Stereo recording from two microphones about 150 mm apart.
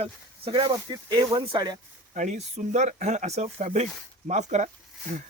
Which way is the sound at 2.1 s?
55° right (ahead or behind).